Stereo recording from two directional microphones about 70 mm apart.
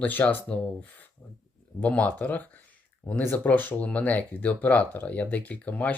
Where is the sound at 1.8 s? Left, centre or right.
Centre.